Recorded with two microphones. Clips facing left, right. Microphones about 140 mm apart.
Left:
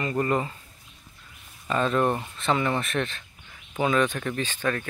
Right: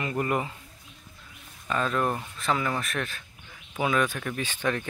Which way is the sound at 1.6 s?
Centre (ahead or behind).